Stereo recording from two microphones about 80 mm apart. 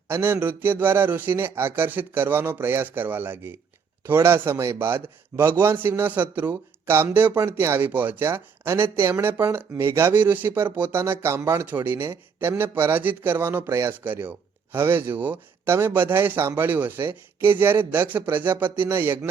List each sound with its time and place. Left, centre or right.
0.1 s a man's voice: right
8.2 s a man's voice: right
10.2 s a man's voice: right
13.7 s speech: right
14.0 s a man's voice: right